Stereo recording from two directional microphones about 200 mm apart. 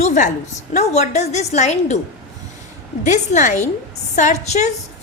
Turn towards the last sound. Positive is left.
turn(degrees=35)  # may be behind; listen again after turning